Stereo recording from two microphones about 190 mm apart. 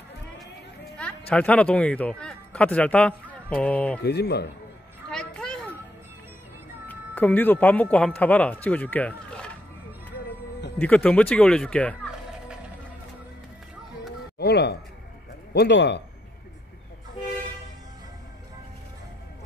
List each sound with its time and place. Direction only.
0.9 s speech: 5° left (ahead or behind)
4.0 s speech: 60° left (ahead or behind)
5.1 s a sound: 5° left (ahead or behind)
6.9 s speech: 10° left (ahead or behind)
10.8 s speech: 5° left (ahead or behind)
14.4 s music: 60° left (ahead or behind)
15.5 s speech: 65° left (ahead or behind)